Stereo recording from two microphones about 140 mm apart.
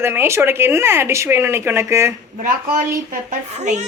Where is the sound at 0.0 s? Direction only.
15° right (ahead or behind).